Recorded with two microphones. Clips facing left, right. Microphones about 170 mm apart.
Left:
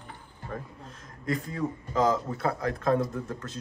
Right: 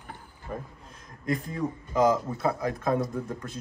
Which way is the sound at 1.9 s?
15° right (ahead or behind).